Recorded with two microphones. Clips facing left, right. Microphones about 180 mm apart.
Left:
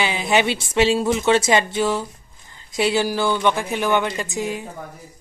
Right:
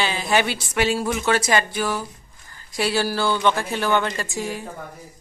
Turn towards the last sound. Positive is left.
turn(degrees=20)  # may be behind; listen again after turning